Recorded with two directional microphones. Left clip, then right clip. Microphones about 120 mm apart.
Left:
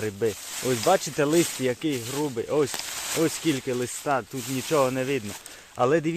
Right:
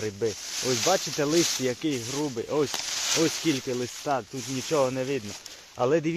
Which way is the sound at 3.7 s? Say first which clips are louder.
Left 2 dB; 25° left (ahead or behind).